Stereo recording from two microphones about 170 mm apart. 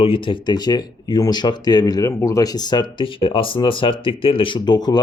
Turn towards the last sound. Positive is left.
turn(degrees=25)  # may be behind; listen again after turning